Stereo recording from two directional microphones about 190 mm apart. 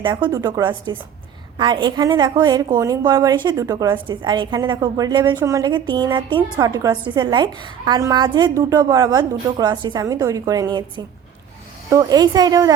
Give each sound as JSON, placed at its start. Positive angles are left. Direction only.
{"t": 0.0, "sound": "a woman's voice", "side_deg": -25}